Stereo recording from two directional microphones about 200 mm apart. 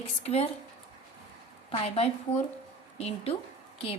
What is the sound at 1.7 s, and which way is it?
A woman's voice, 30° left (ahead or behind).